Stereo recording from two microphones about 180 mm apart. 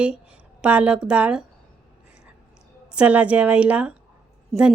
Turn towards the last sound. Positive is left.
turn(degrees=-5)  # may be behind; listen again after turning